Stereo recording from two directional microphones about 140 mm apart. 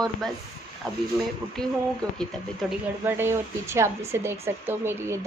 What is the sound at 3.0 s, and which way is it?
Speech, 15° right (ahead or behind).